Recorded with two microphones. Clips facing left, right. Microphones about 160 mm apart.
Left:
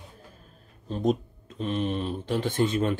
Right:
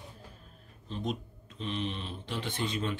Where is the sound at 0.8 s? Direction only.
45° left (ahead or behind).